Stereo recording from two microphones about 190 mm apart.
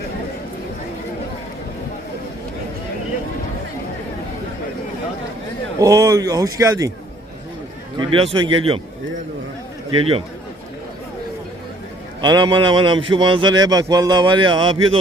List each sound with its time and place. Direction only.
5.8 s a man's voice: 20° right (ahead or behind)
7.9 s a man's voice: 25° right (ahead or behind)
9.9 s a man's voice: 30° right (ahead or behind)
12.2 s a man's voice: 25° right (ahead or behind)